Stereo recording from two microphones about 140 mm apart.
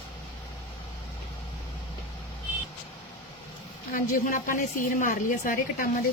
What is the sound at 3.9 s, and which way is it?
A woman's voice, 80° left.